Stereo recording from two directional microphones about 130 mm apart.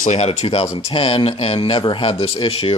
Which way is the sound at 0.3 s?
50° left (ahead or behind).